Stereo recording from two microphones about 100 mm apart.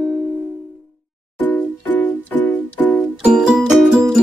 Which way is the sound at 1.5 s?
15° left (ahead or behind).